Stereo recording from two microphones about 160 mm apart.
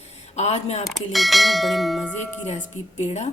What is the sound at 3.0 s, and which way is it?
Speech, 45° left (ahead or behind).